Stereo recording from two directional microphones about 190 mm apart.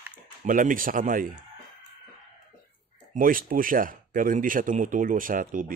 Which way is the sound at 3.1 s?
45° right (ahead or behind).